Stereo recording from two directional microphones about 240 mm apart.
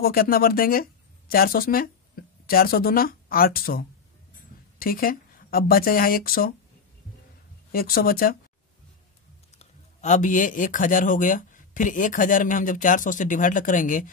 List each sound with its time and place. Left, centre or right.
0.0 s a man's voice: left
7.7 s a man's voice: left
9.6 s a man's voice: left